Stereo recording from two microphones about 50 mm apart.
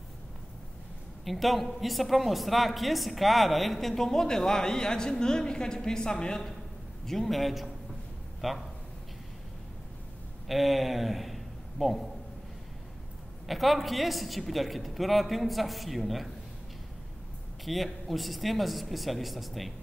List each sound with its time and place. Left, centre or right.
1.2 s a man's voice: centre
7.1 s a man's voice: centre
10.5 s speech: centre
13.5 s a man's voice: centre
17.6 s a man's voice: centre